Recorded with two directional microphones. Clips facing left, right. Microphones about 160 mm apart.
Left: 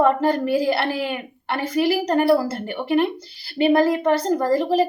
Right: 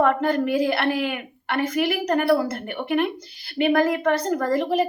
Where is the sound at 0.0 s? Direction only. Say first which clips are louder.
Left 2 dB; 30° left (ahead or behind).